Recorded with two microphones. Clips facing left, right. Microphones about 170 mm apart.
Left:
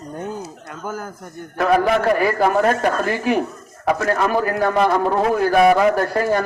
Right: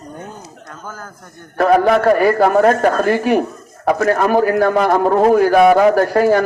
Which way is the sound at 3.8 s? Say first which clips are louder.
Right 4 dB; 45° right (ahead or behind).